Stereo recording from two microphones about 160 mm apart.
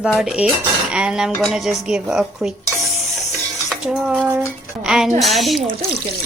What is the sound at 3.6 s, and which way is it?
Dishes, centre (ahead or behind).